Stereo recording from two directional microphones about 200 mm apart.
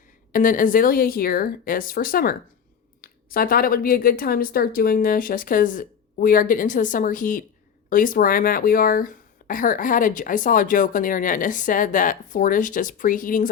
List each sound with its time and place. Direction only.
0.3 s speech: 40° left (ahead or behind)